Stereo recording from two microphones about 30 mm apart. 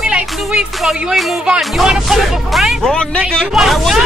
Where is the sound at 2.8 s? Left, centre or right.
Left.